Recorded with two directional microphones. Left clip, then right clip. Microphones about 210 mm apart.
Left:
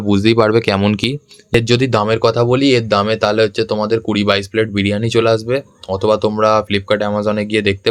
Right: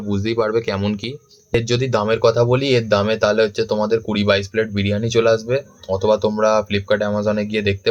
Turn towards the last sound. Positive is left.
turn(degrees=40)  # may be behind; listen again after turning